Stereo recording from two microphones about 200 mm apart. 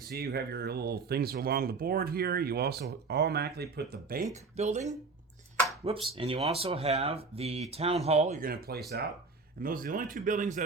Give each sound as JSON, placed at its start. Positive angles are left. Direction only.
{"t": 0.1, "sound": "speech", "side_deg": -50}
{"t": 6.1, "sound": "speech", "side_deg": -25}